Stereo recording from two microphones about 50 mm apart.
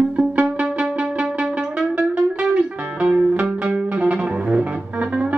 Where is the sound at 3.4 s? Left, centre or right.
Centre.